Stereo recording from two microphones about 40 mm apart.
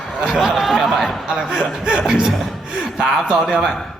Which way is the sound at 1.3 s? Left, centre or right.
Centre.